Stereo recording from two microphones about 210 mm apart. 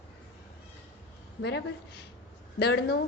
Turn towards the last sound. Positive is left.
turn(degrees=50)  # may be behind; listen again after turning